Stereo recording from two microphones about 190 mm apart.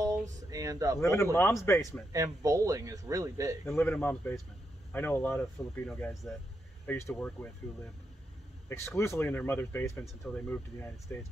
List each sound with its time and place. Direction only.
0.5 s a sound: 20° right (ahead or behind)
0.9 s speech: 15° left (ahead or behind)
2.1 s speech: 15° right (ahead or behind)
3.6 s speech: 10° left (ahead or behind)
8.6 s speech: 15° left (ahead or behind)